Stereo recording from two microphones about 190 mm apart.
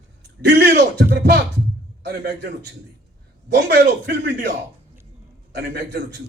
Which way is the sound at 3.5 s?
65° right (ahead or behind).